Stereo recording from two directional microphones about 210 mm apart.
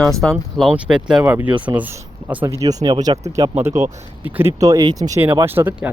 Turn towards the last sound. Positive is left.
turn(degrees=-10)  # may be behind; listen again after turning